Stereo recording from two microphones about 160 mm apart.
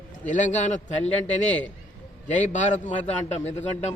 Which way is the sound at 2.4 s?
50° left (ahead or behind).